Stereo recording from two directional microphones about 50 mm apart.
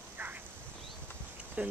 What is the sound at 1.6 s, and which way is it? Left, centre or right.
Speech, right.